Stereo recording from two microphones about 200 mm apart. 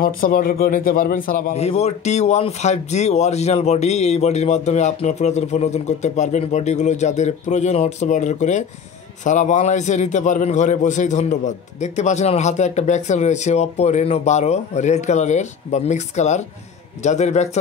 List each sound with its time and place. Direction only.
0.0 s a man's voice: 45° left (ahead or behind)